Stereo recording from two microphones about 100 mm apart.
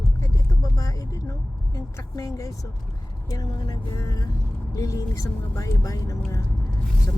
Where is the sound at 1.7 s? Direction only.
35° left (ahead or behind).